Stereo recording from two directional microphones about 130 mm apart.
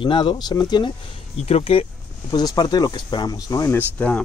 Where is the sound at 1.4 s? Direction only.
50° left (ahead or behind).